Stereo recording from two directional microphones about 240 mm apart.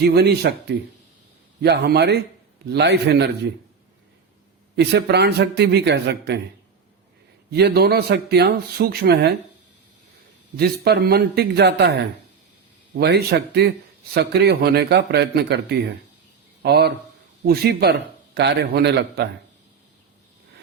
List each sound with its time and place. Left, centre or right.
0.0 s a man's voice: right
4.8 s a man's voice: right
7.5 s speech: right
10.6 s a man's voice: right
13.0 s a man's voice: right